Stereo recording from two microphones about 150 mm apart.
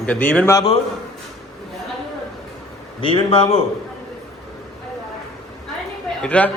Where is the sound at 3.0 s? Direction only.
40° left (ahead or behind).